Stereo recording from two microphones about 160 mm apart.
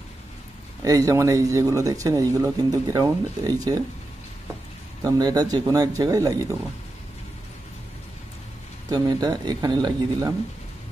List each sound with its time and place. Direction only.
0.8 s speech: 20° right (ahead or behind)
5.0 s speech: 25° right (ahead or behind)
8.9 s speech: 25° right (ahead or behind)